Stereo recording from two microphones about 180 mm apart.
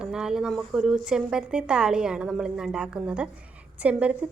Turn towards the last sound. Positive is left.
turn(degrees=-5)  # may be behind; listen again after turning